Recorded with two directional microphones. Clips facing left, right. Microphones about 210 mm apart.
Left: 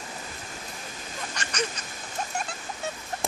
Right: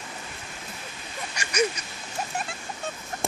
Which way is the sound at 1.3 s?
10° right (ahead or behind).